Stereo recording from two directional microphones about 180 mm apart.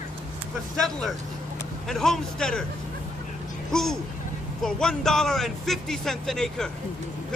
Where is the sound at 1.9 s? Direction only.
Centre (ahead or behind).